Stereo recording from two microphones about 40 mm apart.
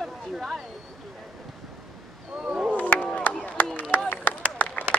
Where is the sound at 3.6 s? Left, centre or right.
Left.